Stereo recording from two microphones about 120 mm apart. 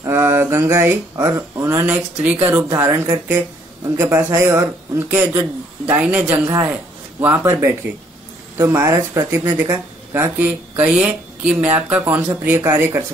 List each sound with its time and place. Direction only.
0.0 s speech: 20° right (ahead or behind)